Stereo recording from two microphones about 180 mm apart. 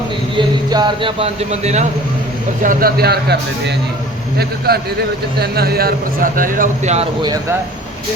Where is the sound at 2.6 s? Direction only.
50° right (ahead or behind).